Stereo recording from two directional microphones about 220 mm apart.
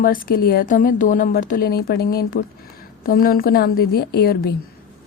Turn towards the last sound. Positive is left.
turn(degrees=45)  # may be behind; listen again after turning